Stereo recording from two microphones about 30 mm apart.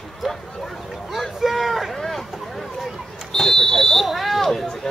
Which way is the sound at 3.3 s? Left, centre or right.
Centre.